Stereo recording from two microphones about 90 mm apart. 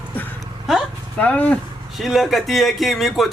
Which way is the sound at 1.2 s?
15° left (ahead or behind).